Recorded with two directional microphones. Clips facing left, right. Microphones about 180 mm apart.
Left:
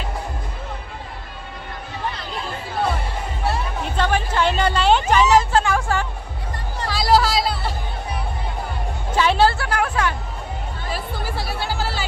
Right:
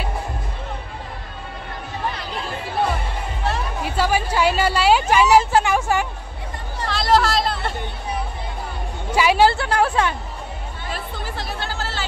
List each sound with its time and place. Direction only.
3.8 s a sound: 5° right (ahead or behind)
6.9 s music: 5° left (ahead or behind)
9.1 s music: 10° right (ahead or behind)
9.5 s music: 25° right (ahead or behind)
10.9 s music: 10° left (ahead or behind)